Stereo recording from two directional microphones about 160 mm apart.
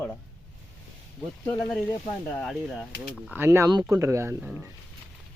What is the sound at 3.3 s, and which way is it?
Speech, 15° right (ahead or behind).